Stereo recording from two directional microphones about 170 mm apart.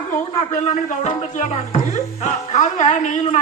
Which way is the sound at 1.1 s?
40° left (ahead or behind).